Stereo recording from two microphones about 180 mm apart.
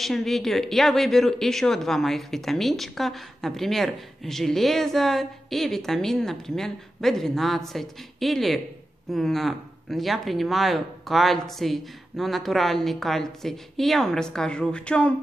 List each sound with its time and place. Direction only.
0.0 s speech: centre (ahead or behind)